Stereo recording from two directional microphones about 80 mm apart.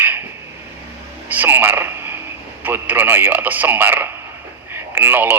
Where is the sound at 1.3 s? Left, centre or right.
Right.